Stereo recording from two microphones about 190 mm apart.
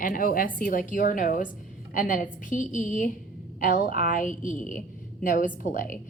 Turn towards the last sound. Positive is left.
turn(degrees=45)  # may be behind; listen again after turning